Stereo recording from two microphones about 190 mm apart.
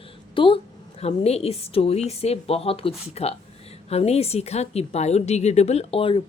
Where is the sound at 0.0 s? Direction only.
30° left (ahead or behind).